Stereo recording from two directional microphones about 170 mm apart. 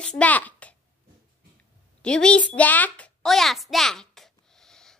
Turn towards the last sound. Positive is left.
turn(degrees=5)  # may be behind; listen again after turning